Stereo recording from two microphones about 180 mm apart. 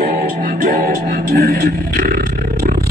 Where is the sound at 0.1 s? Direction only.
50° right (ahead or behind).